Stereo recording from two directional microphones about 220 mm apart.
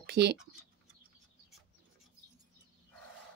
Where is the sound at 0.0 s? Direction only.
50° right (ahead or behind).